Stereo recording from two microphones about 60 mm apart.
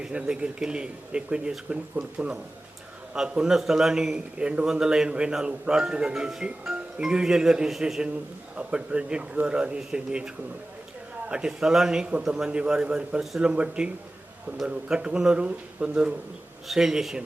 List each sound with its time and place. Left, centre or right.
0.0 s a man's voice: centre
16.6 s a man's voice: centre